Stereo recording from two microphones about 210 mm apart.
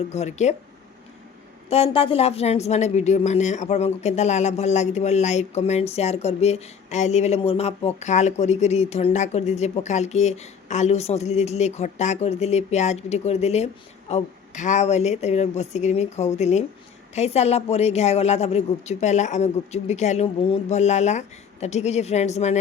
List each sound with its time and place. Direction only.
0.1 s speech: 30° left (ahead or behind)
1.7 s speech: 25° left (ahead or behind)